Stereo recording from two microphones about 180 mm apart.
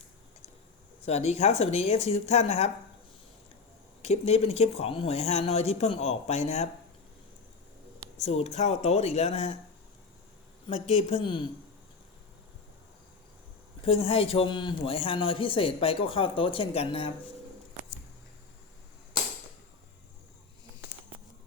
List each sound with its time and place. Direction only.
1.0 s speech: 35° left (ahead or behind)
4.0 s speech: 35° left (ahead or behind)
8.2 s speech: 35° left (ahead or behind)
10.7 s speech: 35° left (ahead or behind)
13.8 s a man's voice: 30° left (ahead or behind)